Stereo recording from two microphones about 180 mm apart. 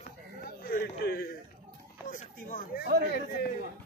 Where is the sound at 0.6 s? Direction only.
60° left (ahead or behind).